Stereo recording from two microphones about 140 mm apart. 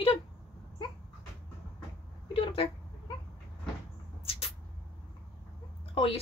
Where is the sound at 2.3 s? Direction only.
40° left (ahead or behind).